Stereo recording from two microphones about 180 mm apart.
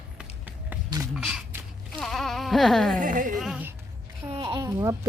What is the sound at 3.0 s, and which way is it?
Speech, 50° right (ahead or behind).